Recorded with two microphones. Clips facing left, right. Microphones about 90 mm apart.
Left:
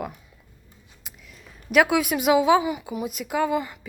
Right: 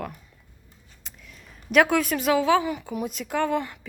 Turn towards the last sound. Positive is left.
turn(degrees=5)  # may be behind; listen again after turning